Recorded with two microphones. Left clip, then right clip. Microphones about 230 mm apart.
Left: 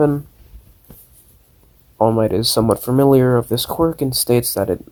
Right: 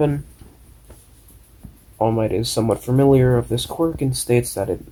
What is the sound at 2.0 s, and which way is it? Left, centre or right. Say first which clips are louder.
Speech: left 4 dB; left.